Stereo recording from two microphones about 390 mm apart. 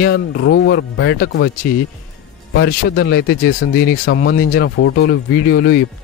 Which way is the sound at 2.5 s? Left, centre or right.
Left.